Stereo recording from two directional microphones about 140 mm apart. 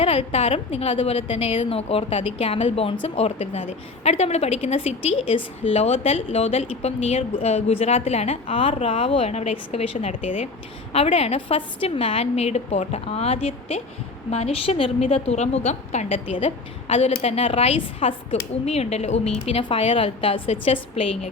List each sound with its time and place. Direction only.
0.0 s a woman's voice: 40° left (ahead or behind); by 10.5 s 60° left (ahead or behind)
10.9 s a woman's voice: 45° left (ahead or behind)